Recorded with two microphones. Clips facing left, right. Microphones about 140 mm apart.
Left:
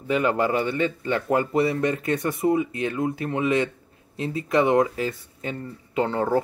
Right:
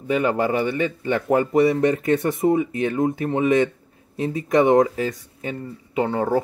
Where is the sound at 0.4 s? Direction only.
25° right (ahead or behind).